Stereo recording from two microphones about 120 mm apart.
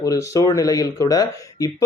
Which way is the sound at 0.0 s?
25° left (ahead or behind).